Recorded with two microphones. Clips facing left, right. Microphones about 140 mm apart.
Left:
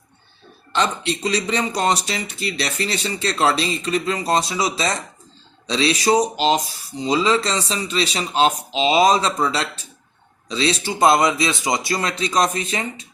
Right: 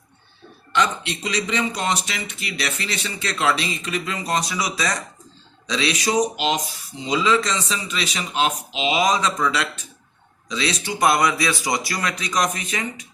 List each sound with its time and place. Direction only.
0.7 s speech: 35° left (ahead or behind)